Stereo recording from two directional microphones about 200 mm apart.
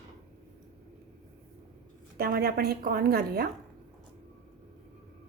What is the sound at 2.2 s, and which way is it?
Speech, 50° right (ahead or behind).